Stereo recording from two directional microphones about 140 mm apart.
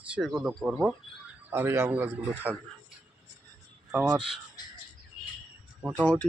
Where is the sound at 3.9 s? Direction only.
5° right (ahead or behind).